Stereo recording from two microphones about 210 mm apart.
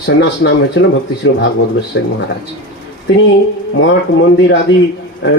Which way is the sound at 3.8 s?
60° left (ahead or behind).